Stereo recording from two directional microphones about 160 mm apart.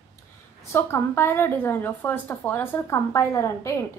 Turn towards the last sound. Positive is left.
turn(degrees=15)  # may be behind; listen again after turning